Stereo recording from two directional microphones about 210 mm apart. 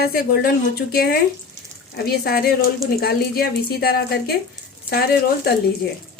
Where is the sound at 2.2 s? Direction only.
45° left (ahead or behind).